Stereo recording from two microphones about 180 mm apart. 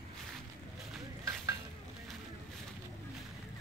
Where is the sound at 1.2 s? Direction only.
20° right (ahead or behind).